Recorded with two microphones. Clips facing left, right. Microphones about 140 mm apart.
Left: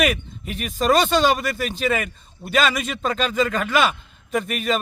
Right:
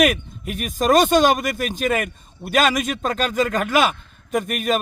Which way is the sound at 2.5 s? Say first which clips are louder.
Right 2 dB; 45° right (ahead or behind).